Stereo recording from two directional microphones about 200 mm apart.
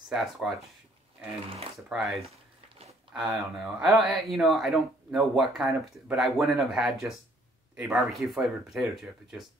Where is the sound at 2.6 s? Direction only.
30° right (ahead or behind).